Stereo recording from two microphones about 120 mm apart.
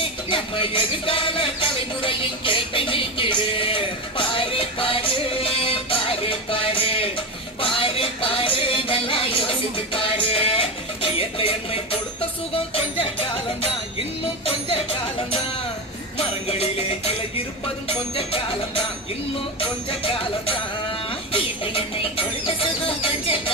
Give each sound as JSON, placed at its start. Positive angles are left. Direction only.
{"t": 0.0, "sound": "music", "side_deg": 45}
{"t": 16.1, "sound": "music", "side_deg": 60}
{"t": 19.5, "sound": "music", "side_deg": 50}
{"t": 21.1, "sound": "a sound", "side_deg": 50}
{"t": 23.0, "sound": "music", "side_deg": 50}